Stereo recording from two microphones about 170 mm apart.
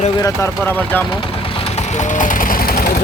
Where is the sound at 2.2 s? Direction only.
55° left (ahead or behind).